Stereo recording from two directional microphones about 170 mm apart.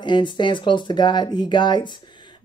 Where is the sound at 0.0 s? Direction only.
25° left (ahead or behind).